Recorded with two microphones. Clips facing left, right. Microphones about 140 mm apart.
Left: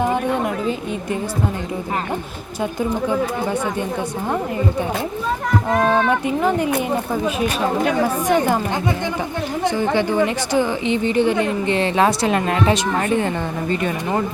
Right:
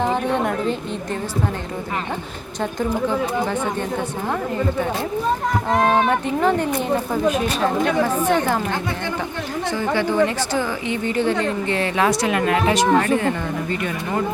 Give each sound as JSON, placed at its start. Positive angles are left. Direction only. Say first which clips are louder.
{"t": 0.0, "sound": "a woman's voice", "louder": "left 1 dB", "side_deg": 10}
{"t": 5.7, "sound": "speech", "louder": "even", "side_deg": -15}
{"t": 6.1, "sound": "speech", "louder": "even", "side_deg": 10}
{"t": 8.0, "sound": "speech", "louder": "left 1 dB", "side_deg": 15}
{"t": 9.6, "sound": "a woman's voice", "louder": "left 3 dB", "side_deg": 15}